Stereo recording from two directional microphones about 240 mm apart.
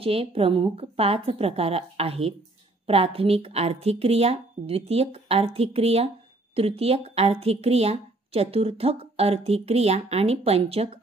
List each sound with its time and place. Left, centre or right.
0.0 s speech: right